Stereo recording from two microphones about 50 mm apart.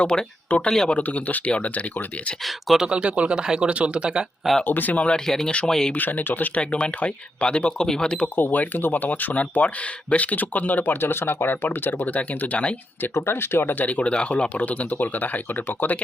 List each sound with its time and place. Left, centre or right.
0.0 s speech: left
2.7 s speech: centre
4.6 s speech: left
4.9 s speech: left
5.2 s speech: centre
5.5 s speech: left
5.9 s speech: left
6.6 s speech: left
8.4 s speech: left
13.1 s speech: left
13.8 s speech: left